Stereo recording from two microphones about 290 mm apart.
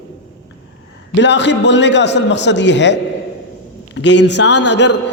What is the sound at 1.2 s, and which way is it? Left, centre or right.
A man's voice, left.